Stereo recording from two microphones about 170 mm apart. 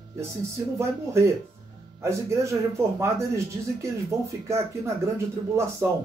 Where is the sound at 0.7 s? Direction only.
15° right (ahead or behind).